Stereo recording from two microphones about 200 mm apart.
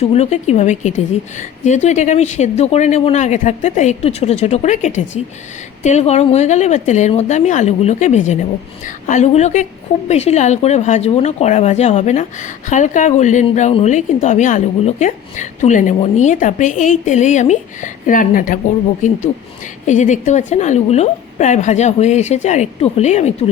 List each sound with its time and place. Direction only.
0.0 s speech: 30° left (ahead or behind)
19.8 s speech: 35° left (ahead or behind)